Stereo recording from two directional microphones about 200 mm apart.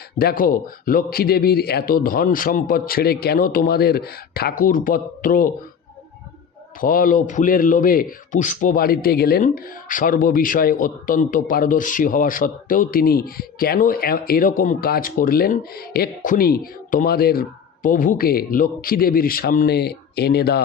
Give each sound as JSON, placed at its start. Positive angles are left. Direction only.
{"t": 0.2, "sound": "a man's voice", "side_deg": 50}
{"t": 6.8, "sound": "a man's voice", "side_deg": 45}